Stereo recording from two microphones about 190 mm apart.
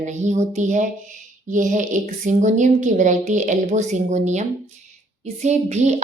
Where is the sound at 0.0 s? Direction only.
40° right (ahead or behind).